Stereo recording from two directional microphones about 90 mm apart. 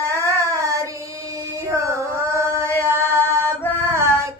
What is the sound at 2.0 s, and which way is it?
Chant, 30° right (ahead or behind).